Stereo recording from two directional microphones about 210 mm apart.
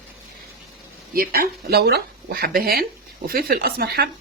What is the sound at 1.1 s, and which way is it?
Speech, 45° right (ahead or behind).